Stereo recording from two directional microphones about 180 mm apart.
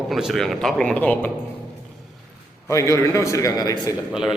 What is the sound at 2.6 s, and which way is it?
A man's voice, 15° left (ahead or behind).